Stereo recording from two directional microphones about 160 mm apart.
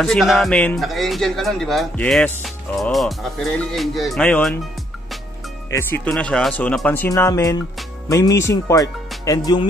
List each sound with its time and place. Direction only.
0.0 s speech: centre (ahead or behind)
5.7 s speech: 15° left (ahead or behind)